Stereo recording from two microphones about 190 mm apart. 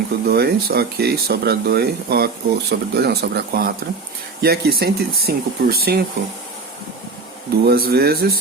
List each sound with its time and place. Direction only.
0.3 s speech: 55° right (ahead or behind)
7.6 s speech: 55° right (ahead or behind)